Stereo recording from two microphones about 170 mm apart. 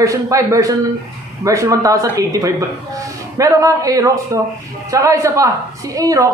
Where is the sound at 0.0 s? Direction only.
20° right (ahead or behind).